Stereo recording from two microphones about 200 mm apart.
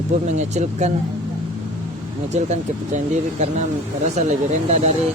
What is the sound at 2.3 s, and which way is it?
Speech, 35° right (ahead or behind).